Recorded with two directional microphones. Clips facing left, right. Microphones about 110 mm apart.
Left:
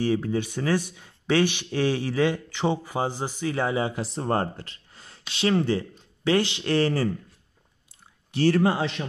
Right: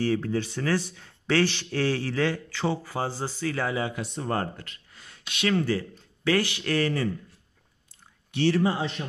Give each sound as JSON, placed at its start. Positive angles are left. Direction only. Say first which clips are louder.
{"t": 0.0, "sound": "speech", "louder": "left 1 dB", "side_deg": 15}
{"t": 8.3, "sound": "speech", "louder": "left 2 dB", "side_deg": 40}
{"t": 8.6, "sound": "a man's voice", "louder": "left 3 dB", "side_deg": 85}